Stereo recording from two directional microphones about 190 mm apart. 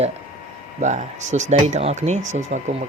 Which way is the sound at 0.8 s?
40° right (ahead or behind).